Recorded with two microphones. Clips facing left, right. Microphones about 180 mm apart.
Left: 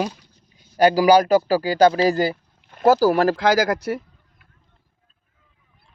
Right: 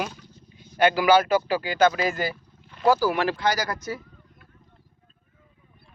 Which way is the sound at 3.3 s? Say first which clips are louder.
Left 7 dB; 90° left.